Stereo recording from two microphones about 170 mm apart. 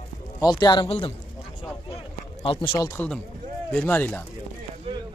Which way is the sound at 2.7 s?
20° left (ahead or behind).